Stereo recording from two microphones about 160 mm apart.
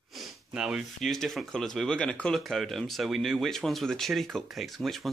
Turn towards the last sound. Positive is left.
turn(degrees=0)  # may be behind; listen again after turning